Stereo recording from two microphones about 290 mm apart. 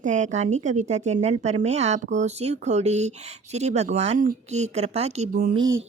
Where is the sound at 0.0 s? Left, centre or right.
Right.